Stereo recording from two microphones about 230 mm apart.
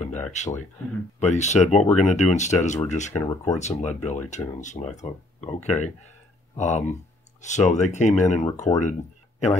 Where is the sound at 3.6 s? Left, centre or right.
Left.